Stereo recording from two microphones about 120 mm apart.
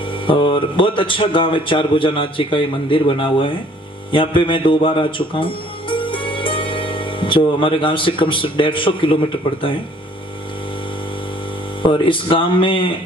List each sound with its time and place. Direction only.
0.3 s a man's voice: 45° left (ahead or behind)
11.8 s a man's voice: 45° left (ahead or behind)